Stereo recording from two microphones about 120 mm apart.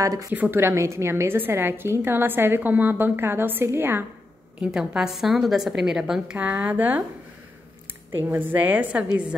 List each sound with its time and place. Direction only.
0.0 s a woman's voice: 25° right (ahead or behind)
0.3 s a woman's voice: 15° right (ahead or behind)
4.6 s a woman's voice: 5° right (ahead or behind)
8.2 s a woman's voice: 15° right (ahead or behind)